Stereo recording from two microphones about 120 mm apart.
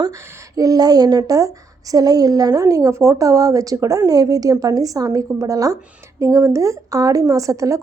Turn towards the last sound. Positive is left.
turn(degrees=-25)  # may be behind; listen again after turning